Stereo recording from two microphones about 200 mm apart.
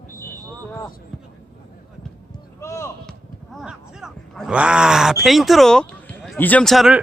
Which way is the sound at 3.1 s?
Centre (ahead or behind).